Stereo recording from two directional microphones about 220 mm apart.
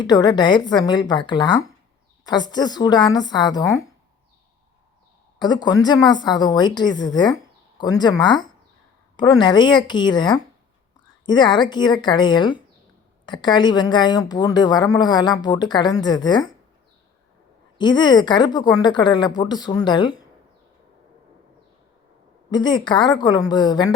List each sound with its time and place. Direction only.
0.0 s a woman's voice: 20° left (ahead or behind)
5.4 s a woman's voice: 20° left (ahead or behind)
17.7 s a woman's voice: 20° left (ahead or behind)
22.5 s a woman's voice: 20° left (ahead or behind)